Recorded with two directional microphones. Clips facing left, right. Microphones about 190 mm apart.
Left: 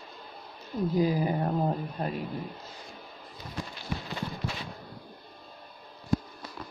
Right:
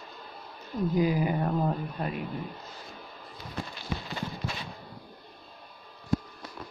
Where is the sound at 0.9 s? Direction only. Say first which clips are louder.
Even; 35° left (ahead or behind).